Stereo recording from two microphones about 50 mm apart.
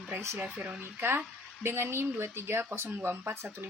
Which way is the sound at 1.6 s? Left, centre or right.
Right.